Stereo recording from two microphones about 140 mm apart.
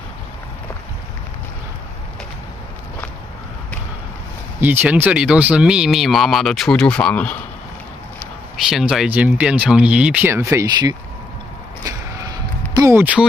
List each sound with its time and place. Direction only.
4.6 s speech: 15° right (ahead or behind); by 7.3 s 10° left (ahead or behind)
8.6 s speech: centre (ahead or behind); by 11.0 s 25° right (ahead or behind)
12.7 s a sound: 20° right (ahead or behind)
13.0 s speech: 10° right (ahead or behind)